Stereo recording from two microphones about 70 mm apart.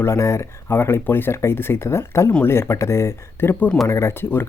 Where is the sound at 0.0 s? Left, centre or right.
Left.